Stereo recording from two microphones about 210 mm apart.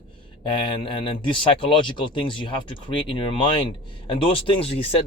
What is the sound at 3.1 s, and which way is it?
Speech, 25° left (ahead or behind).